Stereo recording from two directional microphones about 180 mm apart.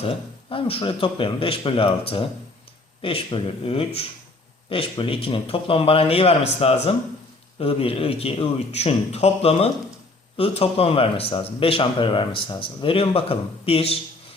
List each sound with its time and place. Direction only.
0.5 s speech: 30° left (ahead or behind)